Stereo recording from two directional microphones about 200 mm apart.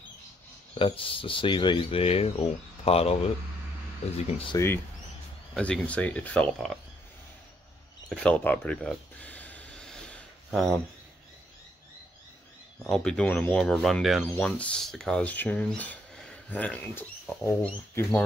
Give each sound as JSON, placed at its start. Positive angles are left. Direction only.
{"t": 0.7, "sound": "speech", "side_deg": 25}
{"t": 5.5, "sound": "speech", "side_deg": 5}
{"t": 8.1, "sound": "a sound", "side_deg": 5}
{"t": 12.7, "sound": "speech", "side_deg": 5}